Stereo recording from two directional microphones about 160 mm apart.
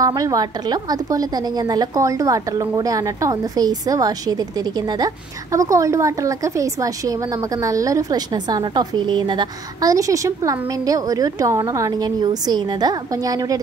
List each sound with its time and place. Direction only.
0.0 s a woman's voice: 20° right (ahead or behind)